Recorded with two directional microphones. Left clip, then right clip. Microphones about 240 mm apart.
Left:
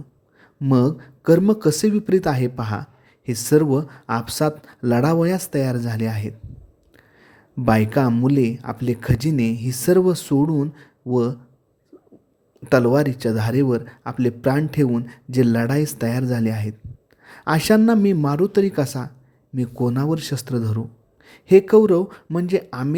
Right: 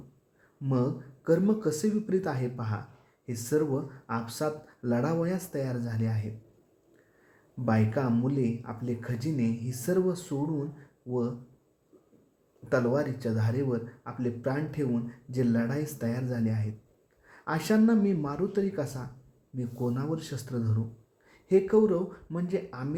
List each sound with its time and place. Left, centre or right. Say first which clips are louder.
0.6 s speech: left 11 dB; left
7.6 s speech: left 11 dB; left
12.6 s speech: left 11 dB; left